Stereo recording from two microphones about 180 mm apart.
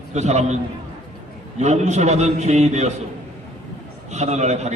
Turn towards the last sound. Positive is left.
turn(degrees=-40)  # may be behind; listen again after turning